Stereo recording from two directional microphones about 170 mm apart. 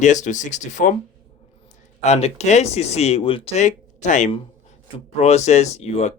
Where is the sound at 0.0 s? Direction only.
45° left (ahead or behind).